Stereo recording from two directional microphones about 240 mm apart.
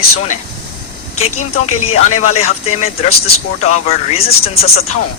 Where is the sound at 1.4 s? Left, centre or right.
Left.